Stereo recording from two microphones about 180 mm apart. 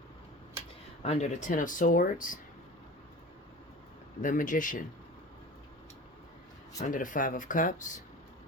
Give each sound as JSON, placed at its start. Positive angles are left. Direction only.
{"t": 1.0, "sound": "speech", "side_deg": 40}
{"t": 4.2, "sound": "speech", "side_deg": 45}
{"t": 6.8, "sound": "speech", "side_deg": 45}